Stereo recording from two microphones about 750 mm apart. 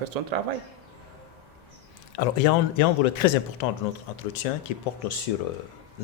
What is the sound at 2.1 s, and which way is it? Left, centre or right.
A man's voice, left.